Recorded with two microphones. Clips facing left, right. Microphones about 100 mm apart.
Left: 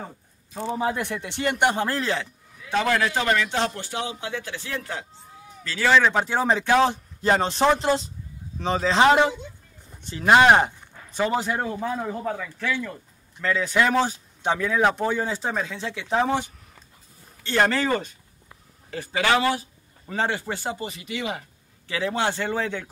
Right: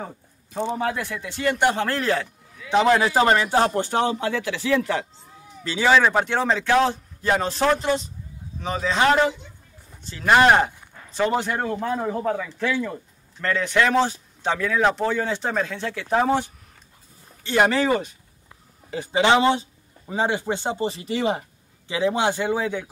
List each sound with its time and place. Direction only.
0.8 s a man's voice: 20° left (ahead or behind)
2.0 s speech: centre (ahead or behind)
2.7 s speech: 20° right (ahead or behind)
3.2 s speech: 35° right (ahead or behind); by 4.3 s 50° right (ahead or behind)
4.3 s speech: 90° right
5.6 s speech: 20° right (ahead or behind)
5.9 s speech: 10° right (ahead or behind)
6.2 s speech: 10° left (ahead or behind)
7.2 s a man's voice: 25° left (ahead or behind)
10.0 s speech: 20° left (ahead or behind)
12.0 s speech: 5° right (ahead or behind)
13.4 s speech: 5° left (ahead or behind); by 21.5 s 35° right (ahead or behind)
21.8 s speech: 20° right (ahead or behind)